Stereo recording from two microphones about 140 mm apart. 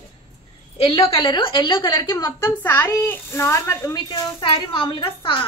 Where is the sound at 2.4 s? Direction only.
15° left (ahead or behind).